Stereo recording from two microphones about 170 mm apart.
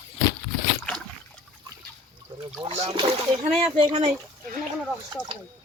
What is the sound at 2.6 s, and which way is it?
Speech, 40° right (ahead or behind).